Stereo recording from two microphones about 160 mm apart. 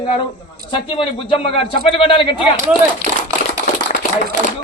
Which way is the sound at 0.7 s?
35° left (ahead or behind).